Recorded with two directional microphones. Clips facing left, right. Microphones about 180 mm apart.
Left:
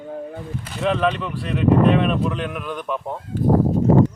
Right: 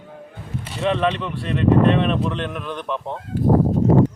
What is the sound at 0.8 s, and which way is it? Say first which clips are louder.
Speech: even; centre (ahead or behind).